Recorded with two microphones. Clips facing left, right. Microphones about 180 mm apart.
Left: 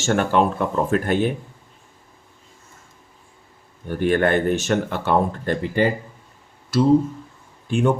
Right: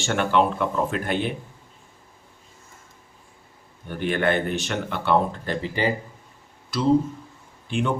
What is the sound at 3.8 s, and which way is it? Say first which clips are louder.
Speech: left 4 dB; 45° left (ahead or behind).